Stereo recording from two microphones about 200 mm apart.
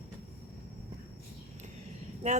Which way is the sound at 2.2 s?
35° right (ahead or behind).